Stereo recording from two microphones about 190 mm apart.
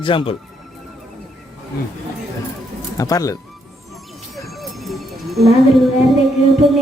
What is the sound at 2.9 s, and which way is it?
Speech, 20° left (ahead or behind).